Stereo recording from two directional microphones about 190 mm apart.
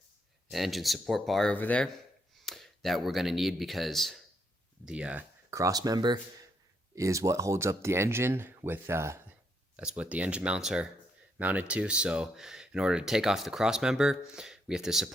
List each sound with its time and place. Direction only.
0.5 s speech: centre (ahead or behind)